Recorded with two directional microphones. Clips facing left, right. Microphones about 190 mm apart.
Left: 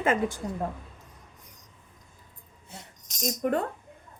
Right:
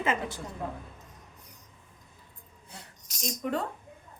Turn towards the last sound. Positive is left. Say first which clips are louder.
# left 4 dB
turn(degrees=55)  # may be behind; listen again after turning